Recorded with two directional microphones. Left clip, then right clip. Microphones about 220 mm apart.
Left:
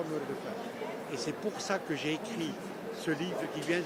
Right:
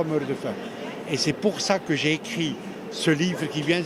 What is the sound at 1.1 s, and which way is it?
Speech, 40° right (ahead or behind).